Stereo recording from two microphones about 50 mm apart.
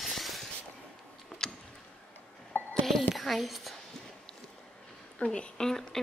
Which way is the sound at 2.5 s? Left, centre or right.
Left.